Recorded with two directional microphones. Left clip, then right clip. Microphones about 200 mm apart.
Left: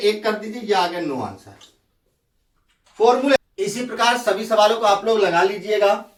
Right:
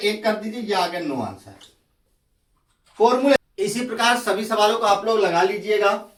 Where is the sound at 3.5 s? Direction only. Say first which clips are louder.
Even; 5° right (ahead or behind).